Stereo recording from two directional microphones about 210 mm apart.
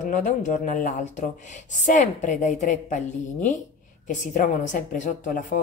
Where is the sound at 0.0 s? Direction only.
35° left (ahead or behind).